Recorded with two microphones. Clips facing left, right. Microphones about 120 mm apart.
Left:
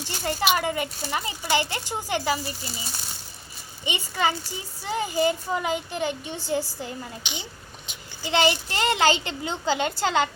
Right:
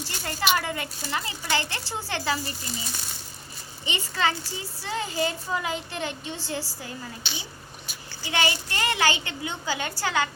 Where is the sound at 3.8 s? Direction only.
15° left (ahead or behind).